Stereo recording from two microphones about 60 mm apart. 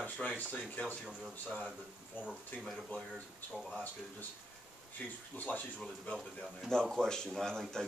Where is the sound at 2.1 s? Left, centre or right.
Left.